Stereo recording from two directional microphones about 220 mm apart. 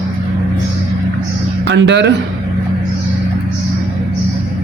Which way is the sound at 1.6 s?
55° right (ahead or behind).